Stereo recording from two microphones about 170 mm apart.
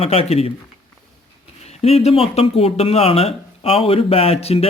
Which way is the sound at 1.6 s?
40° left (ahead or behind).